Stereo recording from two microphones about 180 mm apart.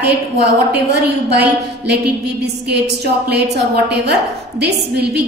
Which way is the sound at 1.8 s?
65° right (ahead or behind).